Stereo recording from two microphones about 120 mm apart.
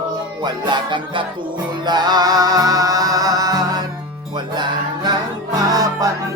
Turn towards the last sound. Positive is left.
turn(degrees=-30)  # may be behind; listen again after turning